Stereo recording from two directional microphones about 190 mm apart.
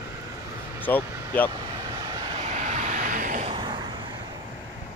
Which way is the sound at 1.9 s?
20° right (ahead or behind).